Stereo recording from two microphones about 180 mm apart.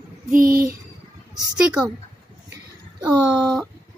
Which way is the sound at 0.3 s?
55° right (ahead or behind).